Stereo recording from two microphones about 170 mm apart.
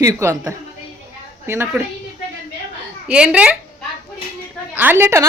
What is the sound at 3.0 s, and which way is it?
Speech, 5° right (ahead or behind).